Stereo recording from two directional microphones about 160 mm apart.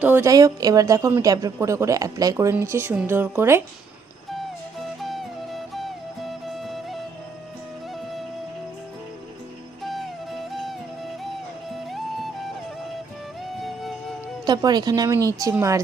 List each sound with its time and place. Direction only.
0.0 s a woman's voice: 10° right (ahead or behind)
0.3 s speech: 20° right (ahead or behind)
4.3 s music: centre (ahead or behind)
9.8 s music: centre (ahead or behind)
13.6 s music: centre (ahead or behind)
14.4 s speech: 25° right (ahead or behind)